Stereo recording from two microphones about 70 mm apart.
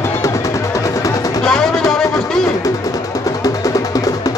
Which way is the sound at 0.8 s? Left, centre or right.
Left.